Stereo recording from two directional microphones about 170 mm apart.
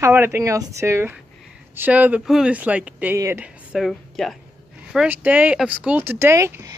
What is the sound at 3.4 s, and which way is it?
Speech, centre (ahead or behind).